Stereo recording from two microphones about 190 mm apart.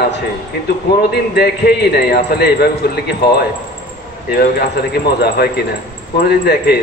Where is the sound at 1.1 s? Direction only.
60° left (ahead or behind).